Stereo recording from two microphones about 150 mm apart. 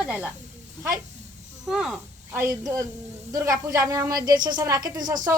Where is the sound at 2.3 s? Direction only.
20° right (ahead or behind).